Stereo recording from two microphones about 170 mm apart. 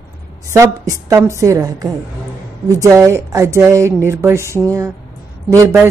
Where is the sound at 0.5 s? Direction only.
20° right (ahead or behind).